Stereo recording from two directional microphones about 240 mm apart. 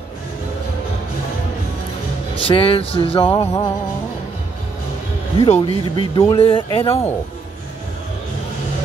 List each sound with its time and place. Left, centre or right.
2.3 s speech: left
3.3 s music: centre
5.4 s speech: left